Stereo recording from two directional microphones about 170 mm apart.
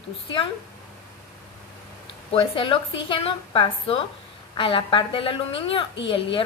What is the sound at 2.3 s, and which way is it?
A woman's voice, 30° left (ahead or behind).